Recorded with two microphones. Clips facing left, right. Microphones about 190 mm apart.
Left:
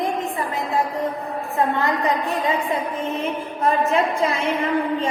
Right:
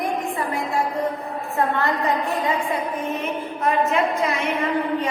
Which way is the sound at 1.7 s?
15° left (ahead or behind).